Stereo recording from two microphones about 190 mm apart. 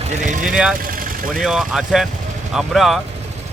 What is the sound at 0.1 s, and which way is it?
Speech, 40° right (ahead or behind).